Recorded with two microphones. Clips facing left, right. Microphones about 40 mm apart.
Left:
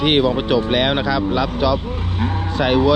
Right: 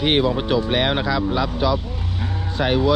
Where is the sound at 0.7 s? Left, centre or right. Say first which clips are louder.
Left 2 dB; left.